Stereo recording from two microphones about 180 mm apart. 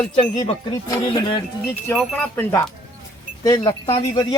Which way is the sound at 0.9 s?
25° left (ahead or behind).